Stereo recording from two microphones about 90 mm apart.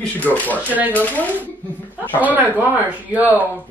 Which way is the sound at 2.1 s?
20° right (ahead or behind).